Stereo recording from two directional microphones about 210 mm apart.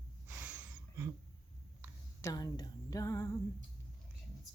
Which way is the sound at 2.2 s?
20° left (ahead or behind).